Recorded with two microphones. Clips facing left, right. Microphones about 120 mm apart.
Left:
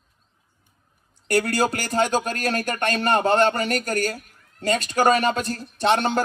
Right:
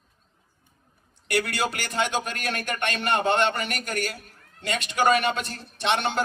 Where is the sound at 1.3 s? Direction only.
40° left (ahead or behind).